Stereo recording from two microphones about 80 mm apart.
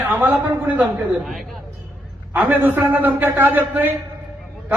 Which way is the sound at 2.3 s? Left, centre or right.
Right.